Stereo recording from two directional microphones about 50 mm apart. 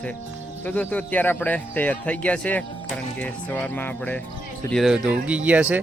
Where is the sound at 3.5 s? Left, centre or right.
Left.